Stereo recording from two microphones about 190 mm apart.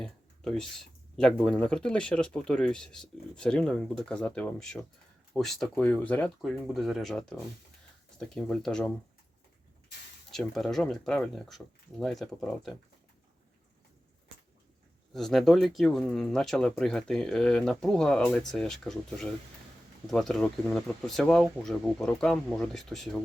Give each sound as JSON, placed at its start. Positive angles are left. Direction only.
{"t": 0.0, "sound": "speech", "side_deg": 5}
{"t": 10.3, "sound": "speech", "side_deg": 0}
{"t": 15.1, "sound": "speech", "side_deg": 0}